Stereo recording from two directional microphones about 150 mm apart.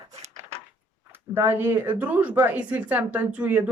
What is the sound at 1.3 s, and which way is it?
Speech, 15° right (ahead or behind).